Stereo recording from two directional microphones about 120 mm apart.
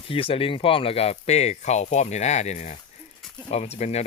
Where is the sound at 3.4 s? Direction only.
65° left (ahead or behind).